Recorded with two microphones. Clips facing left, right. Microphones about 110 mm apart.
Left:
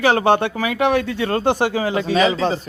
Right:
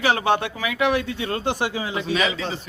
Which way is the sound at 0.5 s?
40° left (ahead or behind).